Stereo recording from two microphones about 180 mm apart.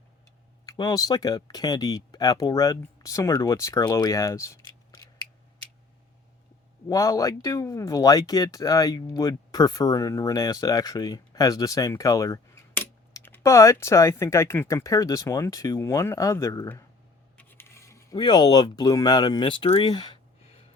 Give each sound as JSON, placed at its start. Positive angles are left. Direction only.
{"t": 0.6, "sound": "speech", "side_deg": 20}
{"t": 6.8, "sound": "speech", "side_deg": 20}
{"t": 17.3, "sound": "a sound", "side_deg": 10}